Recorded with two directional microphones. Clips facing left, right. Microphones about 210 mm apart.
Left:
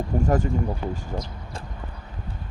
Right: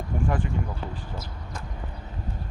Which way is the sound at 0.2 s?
40° left (ahead or behind).